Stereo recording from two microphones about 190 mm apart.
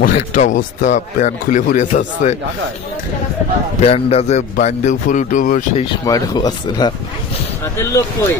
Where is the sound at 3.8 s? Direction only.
30° left (ahead or behind).